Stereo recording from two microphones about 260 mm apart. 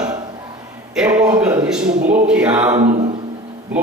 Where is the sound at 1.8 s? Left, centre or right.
Right.